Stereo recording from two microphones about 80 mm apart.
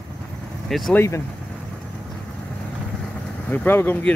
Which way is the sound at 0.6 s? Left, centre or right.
Centre.